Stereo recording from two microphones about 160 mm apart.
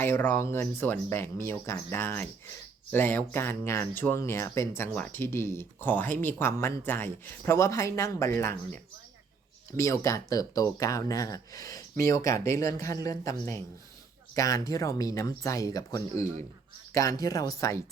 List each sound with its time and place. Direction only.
0.0 s speech: 10° left (ahead or behind)